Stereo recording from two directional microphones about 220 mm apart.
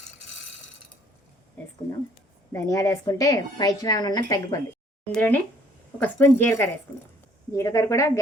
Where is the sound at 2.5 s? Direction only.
15° left (ahead or behind).